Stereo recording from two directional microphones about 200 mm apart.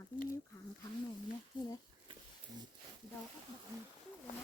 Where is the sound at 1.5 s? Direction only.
25° left (ahead or behind).